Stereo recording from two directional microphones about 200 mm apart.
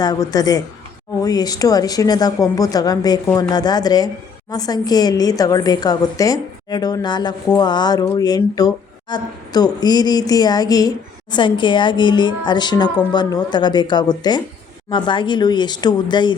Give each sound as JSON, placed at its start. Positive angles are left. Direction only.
{"t": 0.0, "sound": "a woman's voice", "side_deg": 20}